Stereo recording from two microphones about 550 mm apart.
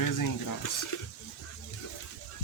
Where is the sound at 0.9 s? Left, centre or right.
Left.